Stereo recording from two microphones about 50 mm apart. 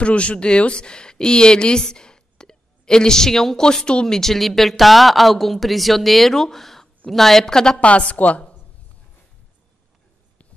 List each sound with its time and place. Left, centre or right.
0.0 s a woman's voice: left
7.8 s a woman's voice: left